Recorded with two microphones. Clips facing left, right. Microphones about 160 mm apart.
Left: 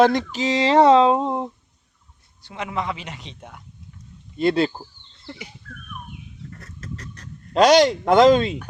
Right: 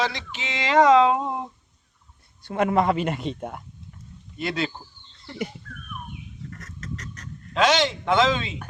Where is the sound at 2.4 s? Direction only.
50° right (ahead or behind).